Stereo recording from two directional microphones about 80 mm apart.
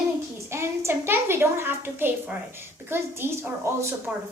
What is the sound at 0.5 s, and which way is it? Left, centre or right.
A woman's voice, right.